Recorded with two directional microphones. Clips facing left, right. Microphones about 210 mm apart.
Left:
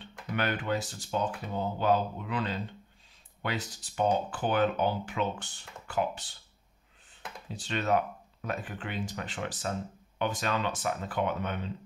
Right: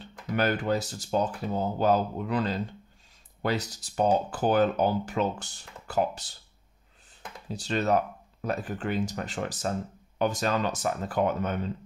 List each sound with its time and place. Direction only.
0.0 s speech: 40° right (ahead or behind)
7.5 s speech: 40° right (ahead or behind)